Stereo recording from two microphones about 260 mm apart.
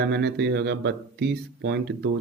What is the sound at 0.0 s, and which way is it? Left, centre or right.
Speech, right.